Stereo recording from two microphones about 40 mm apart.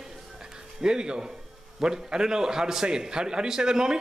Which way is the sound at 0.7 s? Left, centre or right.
Centre.